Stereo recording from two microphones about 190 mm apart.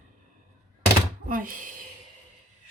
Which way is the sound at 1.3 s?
45° right (ahead or behind).